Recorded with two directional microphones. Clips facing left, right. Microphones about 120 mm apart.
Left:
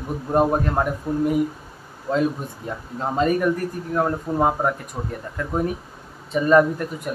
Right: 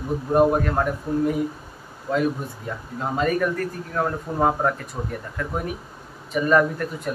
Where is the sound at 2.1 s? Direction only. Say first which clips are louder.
Left 1 dB; 25° left (ahead or behind).